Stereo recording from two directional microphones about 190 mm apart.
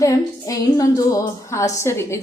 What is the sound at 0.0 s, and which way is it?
A woman's voice, 15° left (ahead or behind).